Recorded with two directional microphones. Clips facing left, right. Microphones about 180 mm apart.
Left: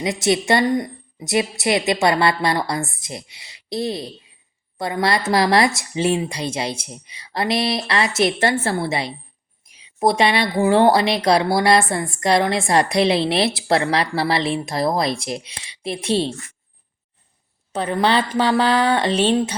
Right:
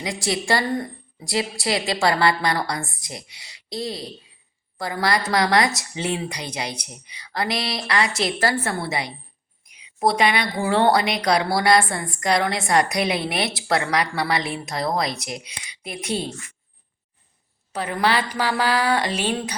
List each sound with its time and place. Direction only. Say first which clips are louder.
0.0 s speech: left 6 dB; 25° left (ahead or behind)
17.7 s speech: left 3 dB; 25° left (ahead or behind)